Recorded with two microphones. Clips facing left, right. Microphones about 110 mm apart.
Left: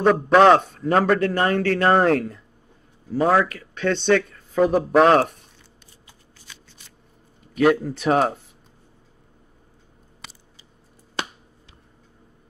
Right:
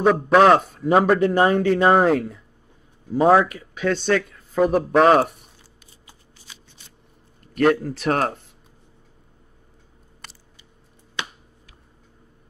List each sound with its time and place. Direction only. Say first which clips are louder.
0.0 s a man's voice: even; centre (ahead or behind)
3.1 s speech: right 3 dB; 20° right (ahead or behind)
3.8 s a man's voice: left 1 dB; 5° right (ahead or behind)
7.5 s a man's voice: even; centre (ahead or behind)